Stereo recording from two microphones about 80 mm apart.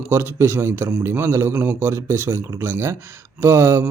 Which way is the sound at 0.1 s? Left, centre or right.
Right.